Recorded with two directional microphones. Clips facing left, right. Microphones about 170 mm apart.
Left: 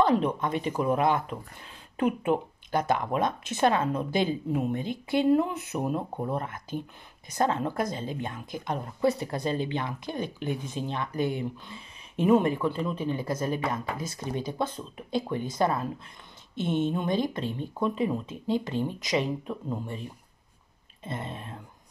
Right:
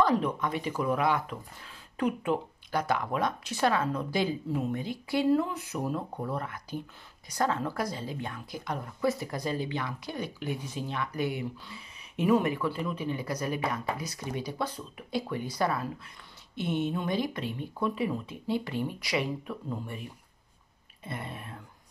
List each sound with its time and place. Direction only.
0.0 s speech: 25° left (ahead or behind)